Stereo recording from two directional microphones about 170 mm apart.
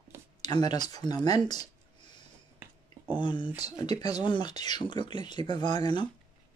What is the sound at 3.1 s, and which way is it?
Speech, 30° left (ahead or behind).